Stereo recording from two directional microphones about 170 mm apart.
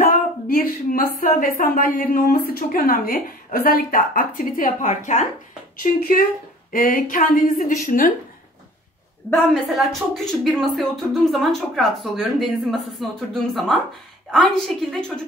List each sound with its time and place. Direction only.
0.0 s a woman's voice: 55° left (ahead or behind)
5.8 s a woman's voice: 55° left (ahead or behind)
9.5 s speech: centre (ahead or behind)